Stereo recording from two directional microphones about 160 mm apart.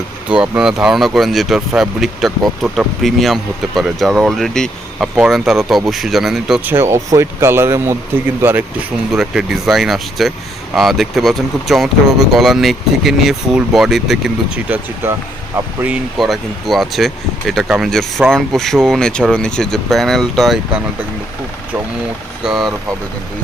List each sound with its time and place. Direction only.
0.3 s speech: 5° right (ahead or behind)
6.7 s speech: 15° right (ahead or behind); by 20.6 s centre (ahead or behind)
22.4 s speech: centre (ahead or behind)